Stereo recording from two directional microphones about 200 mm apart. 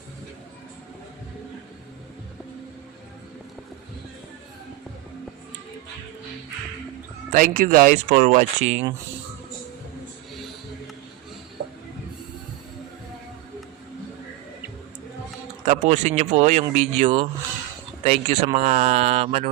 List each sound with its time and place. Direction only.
7.3 s speech: 45° right (ahead or behind)
15.6 s speech: 40° right (ahead or behind)